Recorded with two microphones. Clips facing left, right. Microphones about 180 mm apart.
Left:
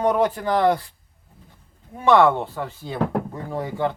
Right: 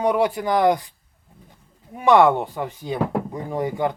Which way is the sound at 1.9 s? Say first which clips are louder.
Right 1 dB; 15° right (ahead or behind).